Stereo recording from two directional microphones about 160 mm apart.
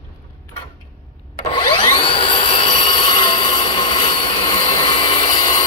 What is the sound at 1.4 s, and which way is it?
Vacuum cleaner, 35° left (ahead or behind).